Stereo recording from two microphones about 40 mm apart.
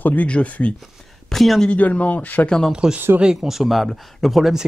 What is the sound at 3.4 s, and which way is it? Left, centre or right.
Speech, centre.